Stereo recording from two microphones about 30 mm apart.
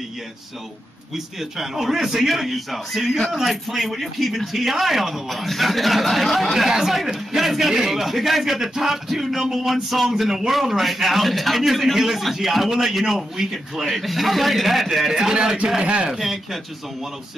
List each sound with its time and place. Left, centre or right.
1.1 s speech: centre
9.7 s speech: centre
15.0 s speech: centre
15.8 s speech: right
16.1 s speech: centre